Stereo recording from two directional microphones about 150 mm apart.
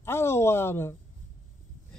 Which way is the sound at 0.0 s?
15° left (ahead or behind).